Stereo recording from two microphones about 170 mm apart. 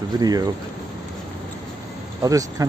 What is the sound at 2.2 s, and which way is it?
Speech, 20° right (ahead or behind).